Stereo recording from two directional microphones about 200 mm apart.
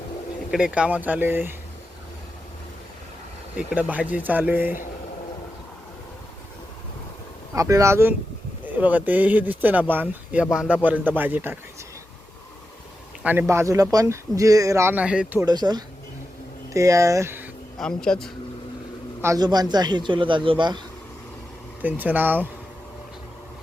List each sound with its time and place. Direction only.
0.5 s speech: 5° right (ahead or behind)
3.5 s speech: 5° right (ahead or behind)
7.5 s speech: 15° right (ahead or behind)
13.2 s speech: 10° right (ahead or behind)
15.4 s a man's voice: 20° right (ahead or behind)
17.7 s speech: 5° left (ahead or behind)
19.2 s a man's voice: 20° right (ahead or behind)
21.8 s speech: 10° right (ahead or behind)